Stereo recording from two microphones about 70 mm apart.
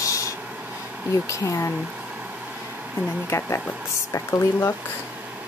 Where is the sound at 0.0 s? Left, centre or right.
Left.